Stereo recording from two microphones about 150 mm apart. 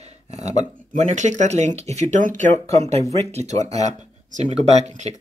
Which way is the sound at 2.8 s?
45° right (ahead or behind).